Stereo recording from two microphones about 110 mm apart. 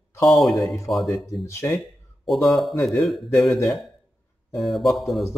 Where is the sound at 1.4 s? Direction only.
25° left (ahead or behind).